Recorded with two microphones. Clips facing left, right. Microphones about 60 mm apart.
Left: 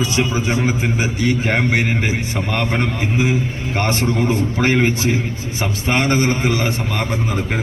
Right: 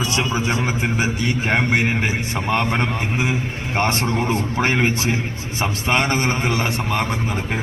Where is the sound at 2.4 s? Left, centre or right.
Right.